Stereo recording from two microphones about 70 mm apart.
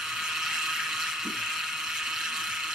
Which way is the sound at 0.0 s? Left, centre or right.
Centre.